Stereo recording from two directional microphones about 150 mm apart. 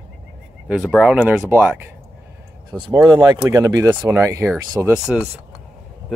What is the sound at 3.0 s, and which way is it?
Speech, 15° right (ahead or behind).